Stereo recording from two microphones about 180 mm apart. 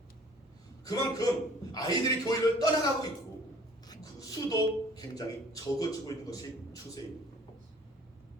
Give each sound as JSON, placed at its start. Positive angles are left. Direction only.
{"t": 0.9, "sound": "a man's voice", "side_deg": 20}